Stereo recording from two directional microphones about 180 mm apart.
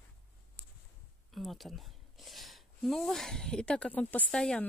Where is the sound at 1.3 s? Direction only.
Centre (ahead or behind).